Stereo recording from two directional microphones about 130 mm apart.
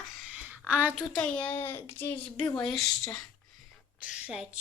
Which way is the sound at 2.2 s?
35° left (ahead or behind).